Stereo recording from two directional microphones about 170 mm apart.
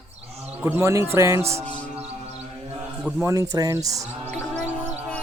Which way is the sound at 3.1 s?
20° right (ahead or behind).